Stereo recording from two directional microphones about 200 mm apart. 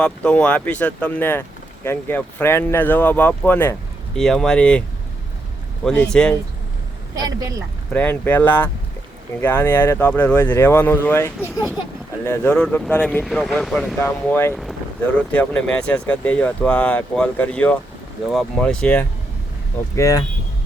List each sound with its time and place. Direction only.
0.0 s speech: 5° left (ahead or behind)
5.8 s speech: 5° left (ahead or behind)
7.2 s speech: 15° right (ahead or behind)
7.9 s speech: 10° left (ahead or behind)
14.5 s speech: centre (ahead or behind)
20.0 s speech: 15° left (ahead or behind)